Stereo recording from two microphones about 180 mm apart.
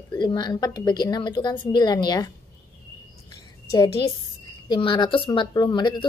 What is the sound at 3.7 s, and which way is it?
Speech, 20° left (ahead or behind).